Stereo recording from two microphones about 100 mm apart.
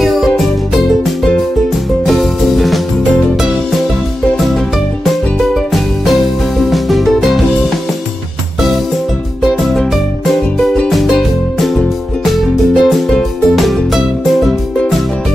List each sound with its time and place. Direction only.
0.0 s music: centre (ahead or behind)
6.7 s music: centre (ahead or behind)
9.4 s music: centre (ahead or behind)
10.9 s music: centre (ahead or behind)